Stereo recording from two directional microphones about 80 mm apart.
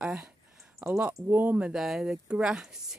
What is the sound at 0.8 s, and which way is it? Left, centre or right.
Speech, centre.